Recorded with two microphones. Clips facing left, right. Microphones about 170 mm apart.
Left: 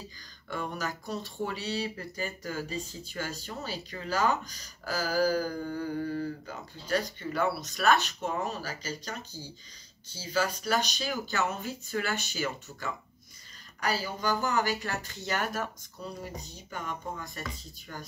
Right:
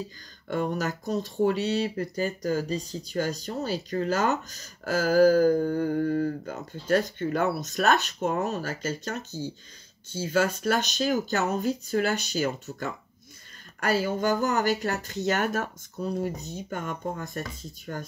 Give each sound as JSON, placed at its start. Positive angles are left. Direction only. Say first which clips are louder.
{"t": 0.5, "sound": "speech", "louder": "right 7 dB", "side_deg": -45}
{"t": 13.7, "sound": "speech", "louder": "right 7 dB", "side_deg": -50}